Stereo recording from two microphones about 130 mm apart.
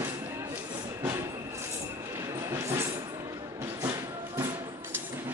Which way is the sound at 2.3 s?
20° right (ahead or behind).